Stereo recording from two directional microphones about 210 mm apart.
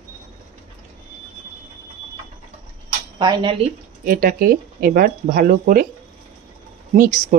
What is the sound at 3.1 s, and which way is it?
Speech, 20° right (ahead or behind).